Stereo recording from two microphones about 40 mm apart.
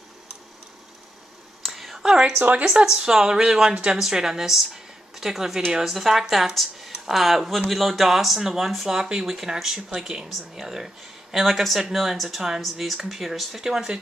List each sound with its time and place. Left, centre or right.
1.6 s a sound: centre
2.6 s a woman's voice: centre
9.8 s speech: right
10.5 s a woman's voice: centre